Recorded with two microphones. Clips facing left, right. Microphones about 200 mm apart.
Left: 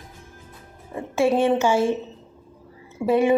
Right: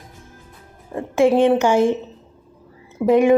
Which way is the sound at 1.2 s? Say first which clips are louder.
Right 4 dB; 15° right (ahead or behind).